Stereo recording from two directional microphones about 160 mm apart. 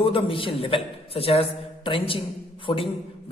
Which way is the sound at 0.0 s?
35° left (ahead or behind).